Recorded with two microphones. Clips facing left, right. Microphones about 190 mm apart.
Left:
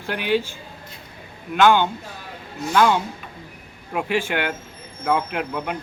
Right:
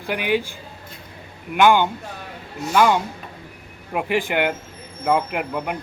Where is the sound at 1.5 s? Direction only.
15° right (ahead or behind).